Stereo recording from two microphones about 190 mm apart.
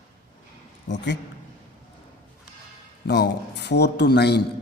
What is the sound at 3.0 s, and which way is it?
A man's voice, 60° left (ahead or behind).